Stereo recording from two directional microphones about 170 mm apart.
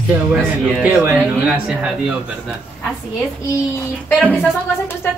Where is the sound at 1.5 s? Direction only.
5° right (ahead or behind).